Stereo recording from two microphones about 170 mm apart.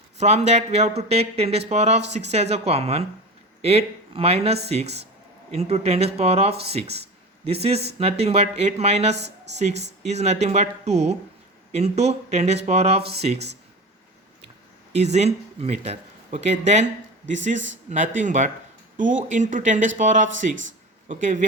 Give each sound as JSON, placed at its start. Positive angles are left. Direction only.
{"t": 0.2, "sound": "speech", "side_deg": -40}
{"t": 14.9, "sound": "speech", "side_deg": -40}